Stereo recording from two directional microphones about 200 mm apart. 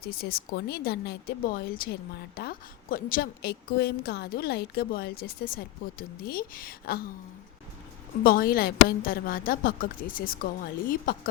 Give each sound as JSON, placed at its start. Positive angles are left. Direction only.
{"t": 0.0, "sound": "a woman's voice", "side_deg": 50}
{"t": 8.2, "sound": "a woman's voice", "side_deg": 45}